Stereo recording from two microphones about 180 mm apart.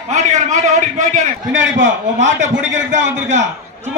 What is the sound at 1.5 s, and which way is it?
Speech, 90° right.